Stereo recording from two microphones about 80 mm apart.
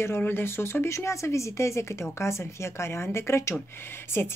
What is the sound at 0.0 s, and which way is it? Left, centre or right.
A woman's voice, left.